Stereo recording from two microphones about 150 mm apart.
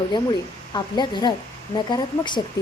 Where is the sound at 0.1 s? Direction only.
30° left (ahead or behind).